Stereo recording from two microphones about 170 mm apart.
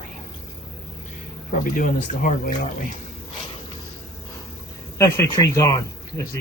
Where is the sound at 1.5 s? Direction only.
55° left (ahead or behind).